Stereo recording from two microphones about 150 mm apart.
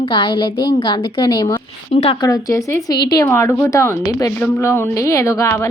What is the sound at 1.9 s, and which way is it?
Speech, 40° left (ahead or behind).